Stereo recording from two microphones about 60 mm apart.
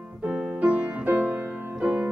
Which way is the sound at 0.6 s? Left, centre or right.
Right.